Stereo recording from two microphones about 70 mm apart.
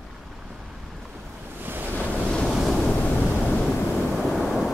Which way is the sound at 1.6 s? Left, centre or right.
Right.